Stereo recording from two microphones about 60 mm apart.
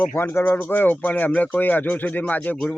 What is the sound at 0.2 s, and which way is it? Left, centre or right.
A man's voice, left.